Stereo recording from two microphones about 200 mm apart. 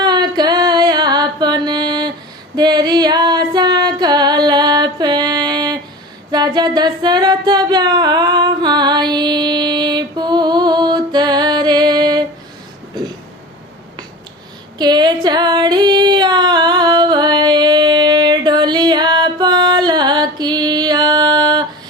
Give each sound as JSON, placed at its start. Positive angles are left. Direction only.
{"t": 0.0, "sound": "carnatic music", "side_deg": -20}
{"t": 2.6, "sound": "female singing", "side_deg": -20}
{"t": 6.3, "sound": "music", "side_deg": -20}
{"t": 14.8, "sound": "female singing", "side_deg": -20}